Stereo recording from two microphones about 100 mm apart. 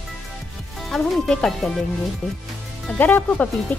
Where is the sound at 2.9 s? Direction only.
20° left (ahead or behind).